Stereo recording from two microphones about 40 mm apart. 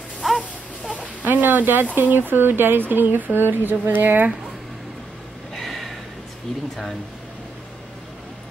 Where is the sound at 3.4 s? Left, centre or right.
Right.